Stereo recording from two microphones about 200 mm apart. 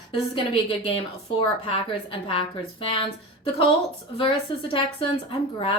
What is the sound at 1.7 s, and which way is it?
Speech, 30° left (ahead or behind).